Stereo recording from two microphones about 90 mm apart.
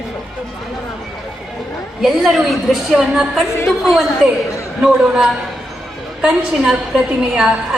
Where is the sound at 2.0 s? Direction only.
Centre (ahead or behind).